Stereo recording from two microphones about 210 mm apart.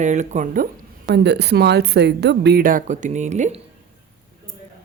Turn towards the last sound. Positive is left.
turn(degrees=-35)  # may be behind; listen again after turning